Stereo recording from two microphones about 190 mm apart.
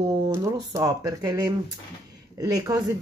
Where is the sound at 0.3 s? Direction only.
15° right (ahead or behind).